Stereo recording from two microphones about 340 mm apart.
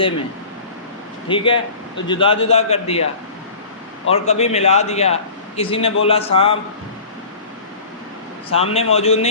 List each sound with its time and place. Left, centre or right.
1.3 s a man's voice: centre
4.1 s a man's voice: centre
8.4 s a man's voice: centre